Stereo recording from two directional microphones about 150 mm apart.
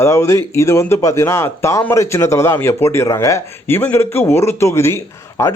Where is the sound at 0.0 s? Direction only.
20° left (ahead or behind).